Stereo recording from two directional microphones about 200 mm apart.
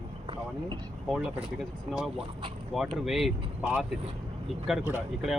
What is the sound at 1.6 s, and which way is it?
Speech, centre (ahead or behind).